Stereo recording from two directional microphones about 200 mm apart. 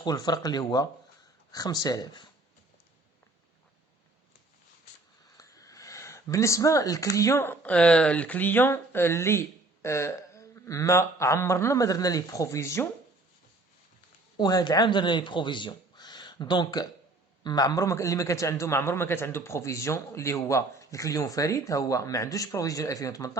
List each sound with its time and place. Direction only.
0.0 s speech: 20° left (ahead or behind)
5.4 s speech: 15° left (ahead or behind)
14.3 s a man's voice: 20° left (ahead or behind)